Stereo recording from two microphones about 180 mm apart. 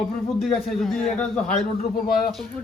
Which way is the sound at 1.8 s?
55° left (ahead or behind).